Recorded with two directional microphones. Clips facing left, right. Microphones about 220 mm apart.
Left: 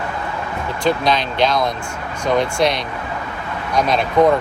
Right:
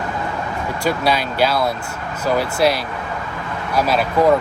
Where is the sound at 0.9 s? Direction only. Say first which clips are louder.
Left 2 dB; 10° right (ahead or behind).